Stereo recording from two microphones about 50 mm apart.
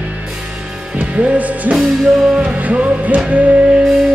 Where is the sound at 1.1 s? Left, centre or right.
Right.